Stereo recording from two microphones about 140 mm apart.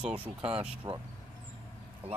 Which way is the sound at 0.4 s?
40° right (ahead or behind).